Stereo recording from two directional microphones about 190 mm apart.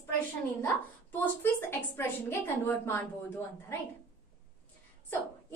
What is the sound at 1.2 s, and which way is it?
A woman's voice, 10° left (ahead or behind).